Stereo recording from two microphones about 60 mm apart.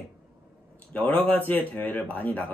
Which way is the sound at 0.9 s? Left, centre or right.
Left.